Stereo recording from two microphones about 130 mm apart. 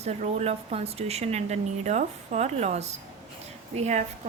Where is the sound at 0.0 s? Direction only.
55° right (ahead or behind).